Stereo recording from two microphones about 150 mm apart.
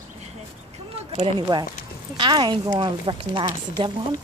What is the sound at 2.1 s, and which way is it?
A woman's voice, 30° right (ahead or behind).